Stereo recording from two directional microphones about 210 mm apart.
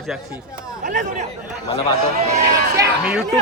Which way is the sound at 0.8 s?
35° right (ahead or behind).